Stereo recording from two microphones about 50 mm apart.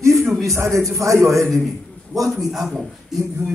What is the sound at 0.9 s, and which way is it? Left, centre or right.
Speech, right.